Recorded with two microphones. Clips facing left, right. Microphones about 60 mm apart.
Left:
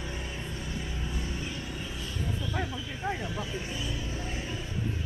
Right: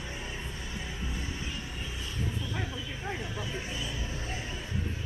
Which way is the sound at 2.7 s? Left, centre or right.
Centre.